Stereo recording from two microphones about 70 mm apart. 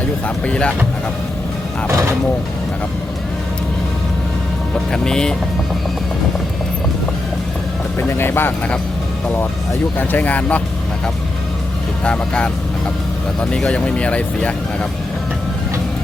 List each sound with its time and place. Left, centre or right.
0.4 s speech: centre
1.9 s a sound: right
4.7 s speech: centre
7.9 s speech: left
12.0 s speech: centre